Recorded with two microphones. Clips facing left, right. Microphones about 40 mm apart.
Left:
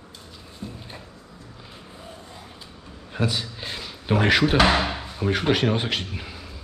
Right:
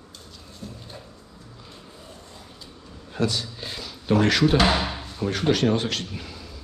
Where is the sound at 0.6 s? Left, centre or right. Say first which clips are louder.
Left 3 dB; left.